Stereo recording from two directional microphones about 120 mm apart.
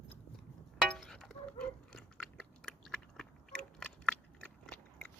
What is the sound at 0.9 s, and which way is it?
Chewing, centre (ahead or behind).